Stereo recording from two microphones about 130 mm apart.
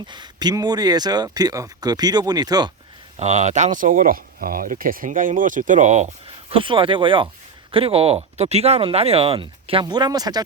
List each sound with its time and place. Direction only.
0.1 s speech: 35° right (ahead or behind)
3.2 s speech: 60° right (ahead or behind)
6.5 s speech: 40° right (ahead or behind)
9.8 s speech: 30° right (ahead or behind)